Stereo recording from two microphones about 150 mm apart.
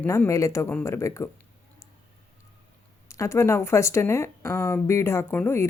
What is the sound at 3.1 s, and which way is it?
Speech, 20° left (ahead or behind).